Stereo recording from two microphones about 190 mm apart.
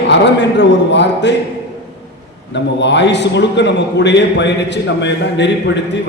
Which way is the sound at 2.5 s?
65° left (ahead or behind).